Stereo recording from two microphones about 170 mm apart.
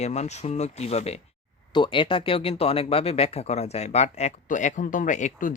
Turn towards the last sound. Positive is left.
turn(degrees=45)  # may be behind; listen again after turning